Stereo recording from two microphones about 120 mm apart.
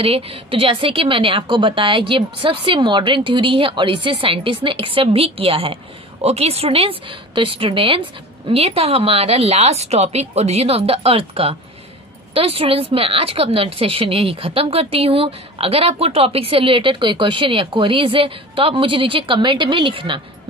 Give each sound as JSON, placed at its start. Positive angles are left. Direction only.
{"t": 0.0, "sound": "a woman's voice", "side_deg": -55}